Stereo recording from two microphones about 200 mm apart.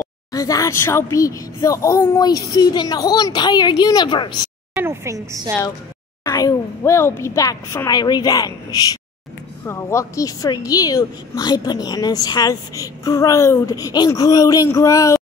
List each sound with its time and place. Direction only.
0.3 s speech: 15° left (ahead or behind)
4.7 s a woman's voice: 15° right (ahead or behind)
6.2 s a woman's voice: 15° left (ahead or behind)
9.7 s a woman's voice: 15° left (ahead or behind)